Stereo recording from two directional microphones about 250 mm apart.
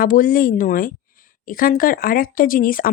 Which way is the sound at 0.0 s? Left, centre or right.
Left.